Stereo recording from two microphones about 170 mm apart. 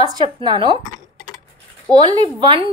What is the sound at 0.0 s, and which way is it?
Speech, 25° right (ahead or behind).